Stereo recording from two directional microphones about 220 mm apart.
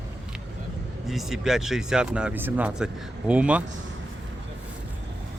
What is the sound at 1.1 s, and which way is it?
Speech, centre (ahead or behind).